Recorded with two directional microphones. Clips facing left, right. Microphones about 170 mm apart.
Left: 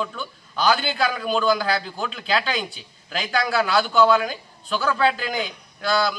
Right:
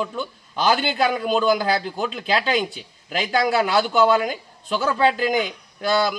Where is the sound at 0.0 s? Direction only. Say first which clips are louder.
Right 3 dB; 20° right (ahead or behind).